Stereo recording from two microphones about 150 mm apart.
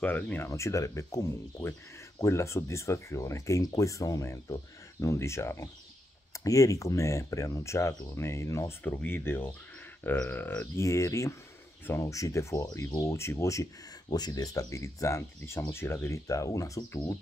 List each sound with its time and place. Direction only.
0.0 s speech: 10° left (ahead or behind)